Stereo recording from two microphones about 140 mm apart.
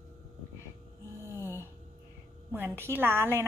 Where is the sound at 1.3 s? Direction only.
15° right (ahead or behind).